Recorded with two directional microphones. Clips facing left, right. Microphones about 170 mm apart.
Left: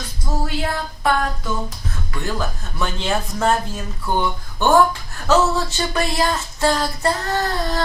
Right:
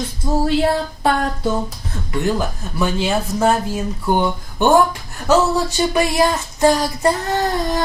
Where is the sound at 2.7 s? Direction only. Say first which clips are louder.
Right 4 dB; 10° right (ahead or behind).